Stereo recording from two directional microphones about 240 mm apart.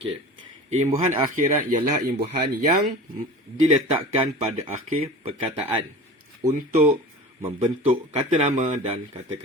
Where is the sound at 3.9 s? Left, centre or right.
Right.